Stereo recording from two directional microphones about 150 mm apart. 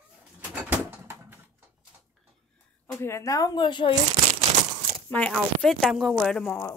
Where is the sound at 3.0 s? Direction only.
20° left (ahead or behind).